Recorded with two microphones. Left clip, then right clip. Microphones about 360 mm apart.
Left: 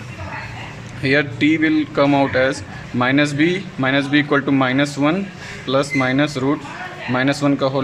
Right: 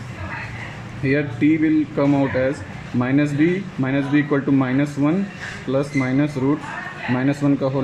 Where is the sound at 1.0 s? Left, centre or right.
Left.